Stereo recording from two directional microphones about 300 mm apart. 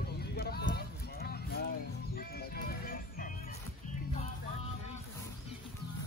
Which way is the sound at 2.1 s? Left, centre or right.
Left.